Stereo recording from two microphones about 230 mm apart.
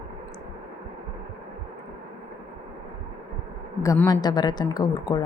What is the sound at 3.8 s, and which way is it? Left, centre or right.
A woman's voice, centre.